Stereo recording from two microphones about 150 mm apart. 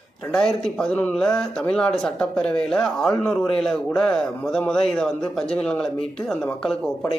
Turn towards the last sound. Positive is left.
turn(degrees=5)  # may be behind; listen again after turning